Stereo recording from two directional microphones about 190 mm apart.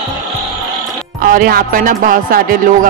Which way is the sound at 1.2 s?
45° right (ahead or behind).